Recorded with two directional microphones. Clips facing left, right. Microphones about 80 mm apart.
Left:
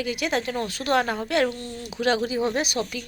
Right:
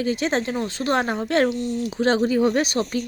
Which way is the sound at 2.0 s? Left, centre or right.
Right.